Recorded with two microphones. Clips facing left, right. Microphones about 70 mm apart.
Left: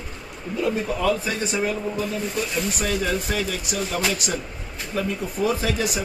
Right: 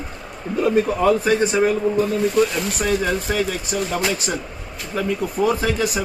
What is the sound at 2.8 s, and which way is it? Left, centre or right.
Speech, right.